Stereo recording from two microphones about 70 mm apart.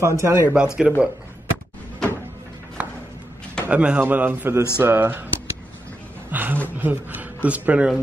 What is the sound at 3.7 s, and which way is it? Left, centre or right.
A man's voice, centre.